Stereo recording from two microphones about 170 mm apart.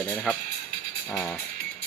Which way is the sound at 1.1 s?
10° left (ahead or behind).